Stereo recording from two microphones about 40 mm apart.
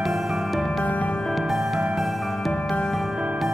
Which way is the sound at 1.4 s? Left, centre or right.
Centre.